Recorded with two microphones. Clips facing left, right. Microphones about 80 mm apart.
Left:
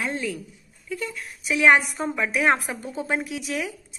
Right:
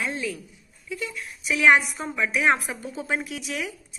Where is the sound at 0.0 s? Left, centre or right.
Left.